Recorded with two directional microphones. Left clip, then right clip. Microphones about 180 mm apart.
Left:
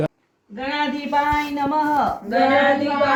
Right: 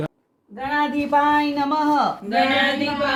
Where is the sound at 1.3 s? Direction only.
55° right (ahead or behind).